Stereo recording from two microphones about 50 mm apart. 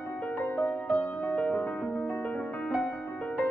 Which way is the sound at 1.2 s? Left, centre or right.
Left.